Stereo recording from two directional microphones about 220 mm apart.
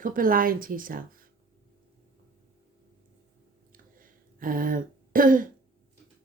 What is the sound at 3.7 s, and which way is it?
Throat clearing, 40° right (ahead or behind).